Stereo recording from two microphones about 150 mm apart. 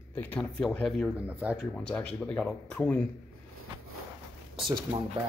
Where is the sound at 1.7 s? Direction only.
5° left (ahead or behind).